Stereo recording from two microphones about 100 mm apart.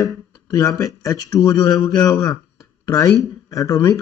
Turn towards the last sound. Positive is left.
turn(degrees=35)  # may be behind; listen again after turning